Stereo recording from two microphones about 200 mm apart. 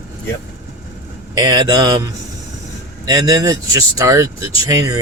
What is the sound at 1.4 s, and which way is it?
Speech, 20° right (ahead or behind).